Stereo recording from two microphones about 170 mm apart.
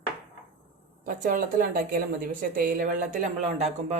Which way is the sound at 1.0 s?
55° right (ahead or behind).